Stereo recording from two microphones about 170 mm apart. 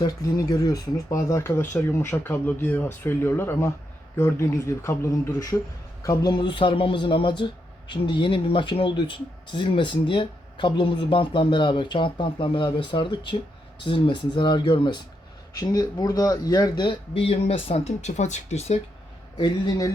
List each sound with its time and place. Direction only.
0.0 s speech: 20° left (ahead or behind); by 18.8 s 40° left (ahead or behind)
19.4 s speech: 25° left (ahead or behind)